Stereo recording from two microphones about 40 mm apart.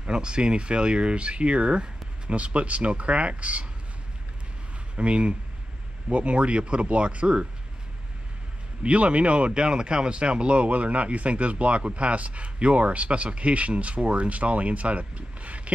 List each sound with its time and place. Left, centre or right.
0.0 s speech: right
4.9 s speech: right
8.8 s speech: right